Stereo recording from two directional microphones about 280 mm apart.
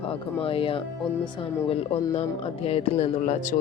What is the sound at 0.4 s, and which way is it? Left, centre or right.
Speech, centre.